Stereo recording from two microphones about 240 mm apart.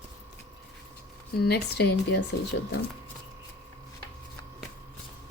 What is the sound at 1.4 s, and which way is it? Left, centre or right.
Speech, left.